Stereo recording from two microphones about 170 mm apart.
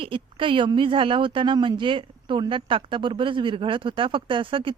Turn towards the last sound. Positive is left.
turn(degrees=-30)  # may be behind; listen again after turning